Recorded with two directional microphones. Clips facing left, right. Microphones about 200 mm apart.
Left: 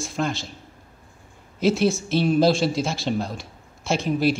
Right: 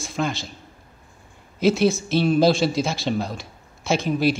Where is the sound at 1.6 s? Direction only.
Centre (ahead or behind).